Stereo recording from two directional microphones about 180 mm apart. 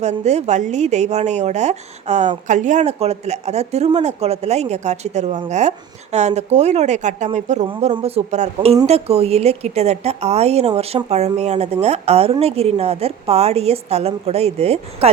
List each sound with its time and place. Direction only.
0.0 s speech: 40° right (ahead or behind)